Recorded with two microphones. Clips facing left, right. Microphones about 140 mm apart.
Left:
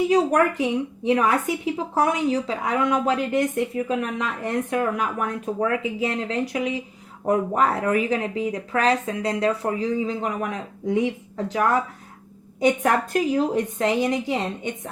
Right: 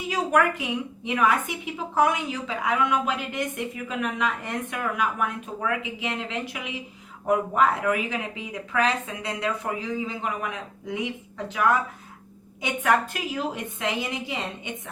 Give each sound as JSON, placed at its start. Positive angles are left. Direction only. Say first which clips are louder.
{"t": 0.1, "sound": "a woman's voice", "louder": "left 4 dB", "side_deg": 35}